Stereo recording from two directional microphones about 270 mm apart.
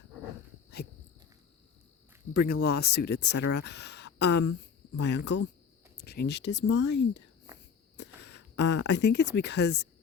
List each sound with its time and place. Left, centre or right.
2.3 s speech: left